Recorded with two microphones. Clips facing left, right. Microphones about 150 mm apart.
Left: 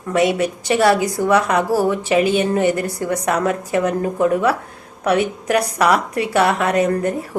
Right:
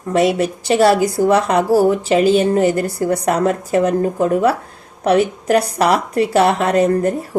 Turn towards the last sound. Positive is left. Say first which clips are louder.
# right 3 dB
turn(degrees=-30)  # may be behind; listen again after turning